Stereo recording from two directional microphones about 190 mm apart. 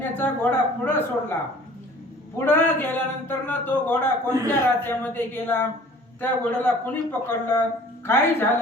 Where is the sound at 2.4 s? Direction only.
10° left (ahead or behind).